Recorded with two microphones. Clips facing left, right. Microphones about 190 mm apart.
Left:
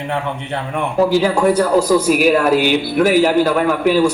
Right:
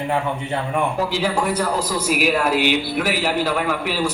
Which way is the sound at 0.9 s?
50° left (ahead or behind).